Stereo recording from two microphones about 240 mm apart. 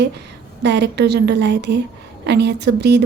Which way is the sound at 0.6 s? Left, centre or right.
Right.